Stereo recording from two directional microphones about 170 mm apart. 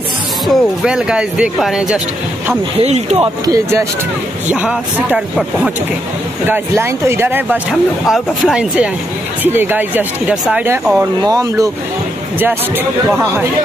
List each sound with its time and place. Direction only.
0.5 s speech: 5° right (ahead or behind)
2.8 s speech: 40° right (ahead or behind)
3.4 s speech: 20° right (ahead or behind)
4.5 s speech: 10° right (ahead or behind)